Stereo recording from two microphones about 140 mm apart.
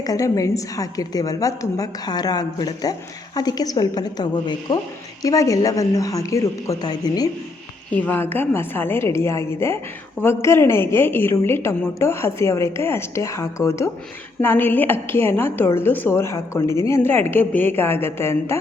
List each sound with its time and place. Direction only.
0.0 s a woman's voice: 25° left (ahead or behind)
8.0 s a woman's voice: 15° left (ahead or behind)